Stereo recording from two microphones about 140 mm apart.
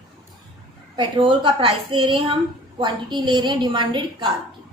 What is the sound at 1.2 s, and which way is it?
A woman's voice, 40° right (ahead or behind).